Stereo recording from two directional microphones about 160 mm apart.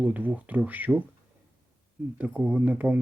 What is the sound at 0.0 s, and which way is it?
Speech, 10° right (ahead or behind).